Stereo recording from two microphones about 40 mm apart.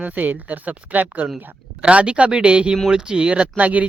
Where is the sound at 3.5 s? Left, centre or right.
Right.